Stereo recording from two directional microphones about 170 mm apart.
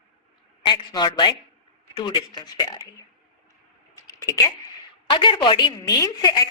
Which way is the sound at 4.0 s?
20° left (ahead or behind).